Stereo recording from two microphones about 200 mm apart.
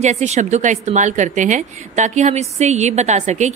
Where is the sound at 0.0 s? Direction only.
35° right (ahead or behind).